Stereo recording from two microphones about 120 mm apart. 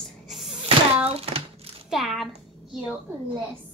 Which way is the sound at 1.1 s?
55° right (ahead or behind).